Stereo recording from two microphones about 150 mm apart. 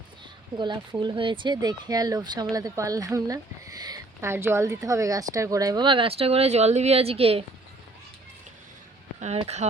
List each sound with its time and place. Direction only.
0.5 s speech: 30° right (ahead or behind)
9.2 s speech: 45° right (ahead or behind)